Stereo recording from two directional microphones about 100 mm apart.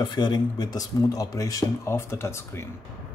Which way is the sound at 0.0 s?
50° left (ahead or behind).